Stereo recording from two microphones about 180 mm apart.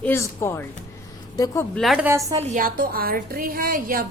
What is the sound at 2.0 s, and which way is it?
Speech, 20° right (ahead or behind).